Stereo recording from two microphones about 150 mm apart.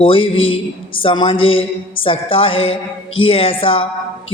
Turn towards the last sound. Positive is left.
turn(degrees=35)  # may be behind; listen again after turning